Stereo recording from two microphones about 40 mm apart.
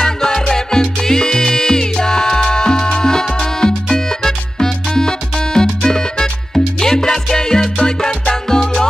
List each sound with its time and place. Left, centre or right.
0.0 s music: centre